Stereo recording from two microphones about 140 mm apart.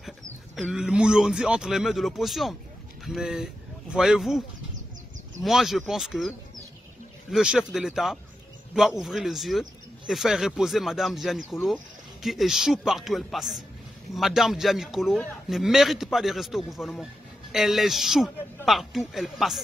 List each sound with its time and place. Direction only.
0.6 s a man's voice: 5° right (ahead or behind)
5.4 s a man's voice: centre (ahead or behind)